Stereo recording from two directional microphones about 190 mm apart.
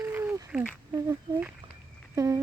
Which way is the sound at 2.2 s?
15° right (ahead or behind).